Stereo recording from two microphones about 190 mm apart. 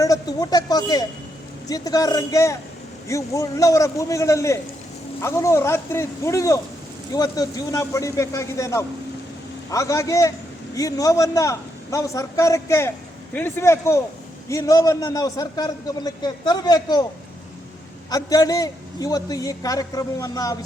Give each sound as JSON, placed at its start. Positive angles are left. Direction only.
{"t": 0.0, "sound": "a man's voice", "side_deg": 20}
{"t": 18.1, "sound": "a man's voice", "side_deg": 20}